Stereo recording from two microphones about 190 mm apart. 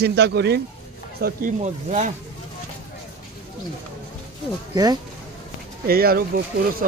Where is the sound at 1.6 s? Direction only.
35° right (ahead or behind).